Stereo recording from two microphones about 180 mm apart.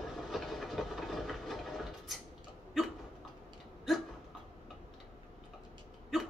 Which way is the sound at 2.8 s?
Centre (ahead or behind).